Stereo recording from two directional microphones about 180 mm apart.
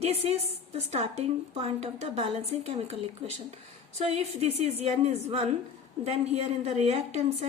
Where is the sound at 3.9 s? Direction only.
35° right (ahead or behind).